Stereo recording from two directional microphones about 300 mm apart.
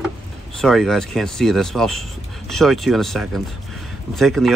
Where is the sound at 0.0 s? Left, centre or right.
Centre.